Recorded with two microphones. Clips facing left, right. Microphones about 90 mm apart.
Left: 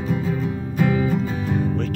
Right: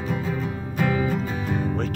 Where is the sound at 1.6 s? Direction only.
15° right (ahead or behind).